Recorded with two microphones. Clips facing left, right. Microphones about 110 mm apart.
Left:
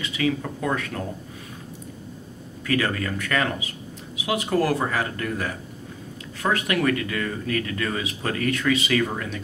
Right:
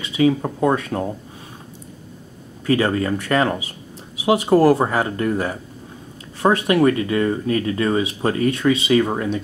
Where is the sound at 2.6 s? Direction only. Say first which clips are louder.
Right 6 dB; 30° right (ahead or behind).